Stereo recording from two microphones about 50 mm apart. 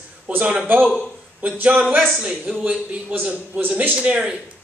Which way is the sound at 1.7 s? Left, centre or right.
Centre.